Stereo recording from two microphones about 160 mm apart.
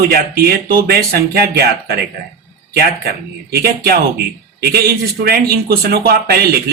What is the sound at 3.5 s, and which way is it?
A man's voice, 75° right (ahead or behind).